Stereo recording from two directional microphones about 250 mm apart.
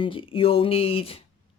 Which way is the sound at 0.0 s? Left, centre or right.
Left.